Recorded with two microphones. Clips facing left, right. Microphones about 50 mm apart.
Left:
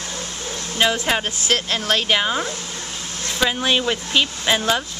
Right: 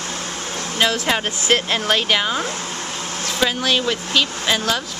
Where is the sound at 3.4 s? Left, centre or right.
Centre.